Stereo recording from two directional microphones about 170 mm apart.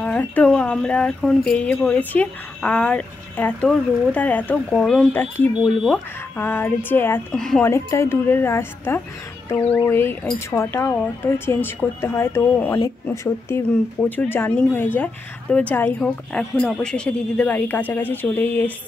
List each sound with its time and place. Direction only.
0.0 s a woman's voice: 10° left (ahead or behind)
5.5 s speech: 5° right (ahead or behind)
6.3 s a woman's voice: 10° left (ahead or behind)
7.6 s a woman's voice: 15° left (ahead or behind)